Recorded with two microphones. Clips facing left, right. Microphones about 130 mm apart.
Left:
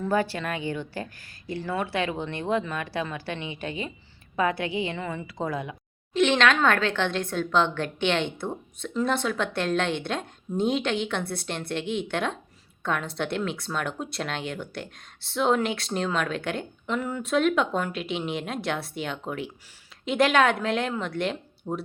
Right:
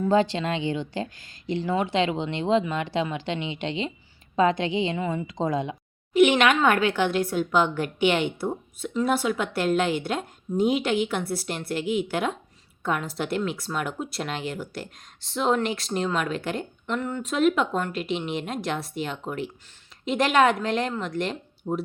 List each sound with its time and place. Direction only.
0.0 s speech: 20° right (ahead or behind)
6.1 s speech: 10° right (ahead or behind)